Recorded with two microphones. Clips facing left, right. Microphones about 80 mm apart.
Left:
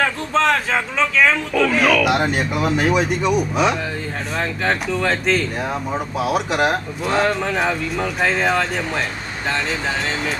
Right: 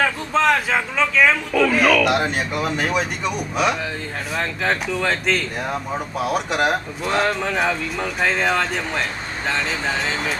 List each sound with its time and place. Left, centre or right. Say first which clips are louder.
0.0 s speech: even; centre